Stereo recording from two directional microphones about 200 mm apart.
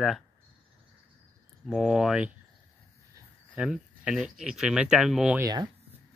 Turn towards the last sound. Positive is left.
turn(degrees=-20)  # may be behind; listen again after turning